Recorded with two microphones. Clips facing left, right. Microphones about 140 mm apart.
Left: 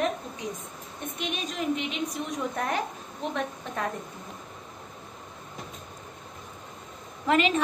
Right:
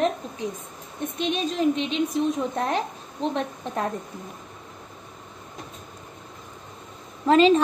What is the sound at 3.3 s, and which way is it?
Speech, 35° right (ahead or behind).